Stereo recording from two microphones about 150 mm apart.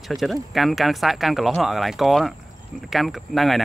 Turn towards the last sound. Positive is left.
turn(degrees=0)  # may be behind; listen again after turning